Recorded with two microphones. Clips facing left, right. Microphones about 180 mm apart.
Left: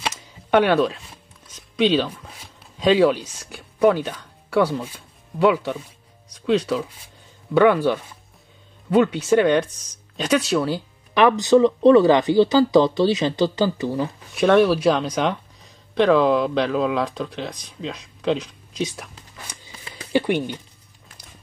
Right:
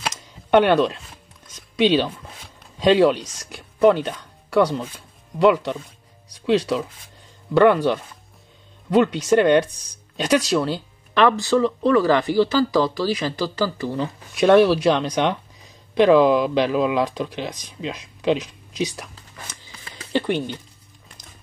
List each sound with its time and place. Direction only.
0.0 s camera: centre (ahead or behind)
1.5 s a sound: centre (ahead or behind)
3.3 s speech: centre (ahead or behind)
11.1 s speech: 15° left (ahead or behind)
14.3 s speech: centre (ahead or behind)
19.4 s a sound: 10° left (ahead or behind)